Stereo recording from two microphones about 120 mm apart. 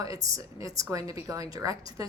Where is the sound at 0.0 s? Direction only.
30° right (ahead or behind).